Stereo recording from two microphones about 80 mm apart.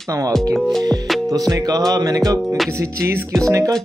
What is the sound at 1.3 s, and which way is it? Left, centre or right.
Speech, right.